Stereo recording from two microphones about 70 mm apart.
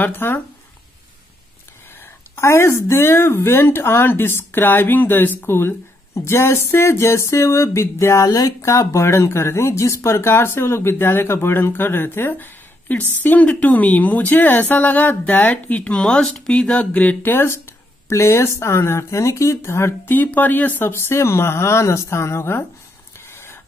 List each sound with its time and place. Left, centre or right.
0.0 s speech: left
2.3 s speech: left
18.0 s speech: left
20.2 s speech: left
20.9 s speech: left
23.3 s a sound: left